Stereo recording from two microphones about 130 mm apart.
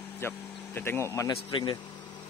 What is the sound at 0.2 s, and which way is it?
Speech, 20° left (ahead or behind).